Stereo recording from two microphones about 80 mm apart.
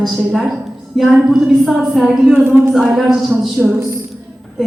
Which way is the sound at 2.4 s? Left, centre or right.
Right.